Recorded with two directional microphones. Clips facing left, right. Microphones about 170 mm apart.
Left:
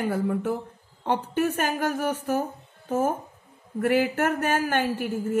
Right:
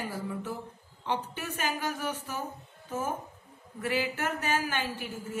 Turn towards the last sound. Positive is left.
turn(degrees=55)  # may be behind; listen again after turning